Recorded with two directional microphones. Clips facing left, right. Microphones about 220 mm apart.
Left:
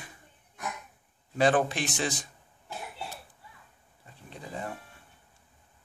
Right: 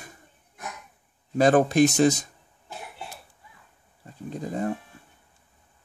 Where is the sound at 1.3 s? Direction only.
40° right (ahead or behind).